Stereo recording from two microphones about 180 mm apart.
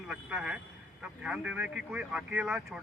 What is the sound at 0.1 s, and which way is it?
Speech, 5° right (ahead or behind).